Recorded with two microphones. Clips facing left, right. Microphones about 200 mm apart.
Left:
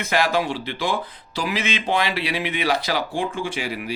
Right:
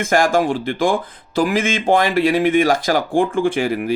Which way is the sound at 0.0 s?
45° right (ahead or behind).